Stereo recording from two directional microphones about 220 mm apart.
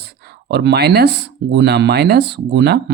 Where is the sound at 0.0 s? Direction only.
45° right (ahead or behind).